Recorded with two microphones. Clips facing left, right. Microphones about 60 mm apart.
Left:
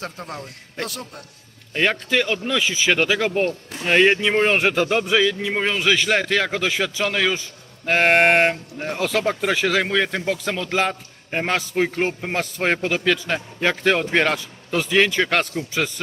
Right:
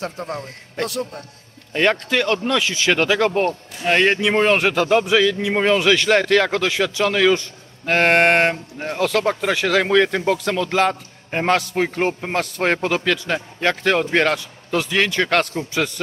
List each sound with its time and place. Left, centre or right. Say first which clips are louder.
0.2 s a man's voice: right 5 dB; centre